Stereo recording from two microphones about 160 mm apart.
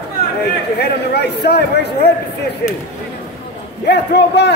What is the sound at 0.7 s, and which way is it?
A man's voice, 90° left.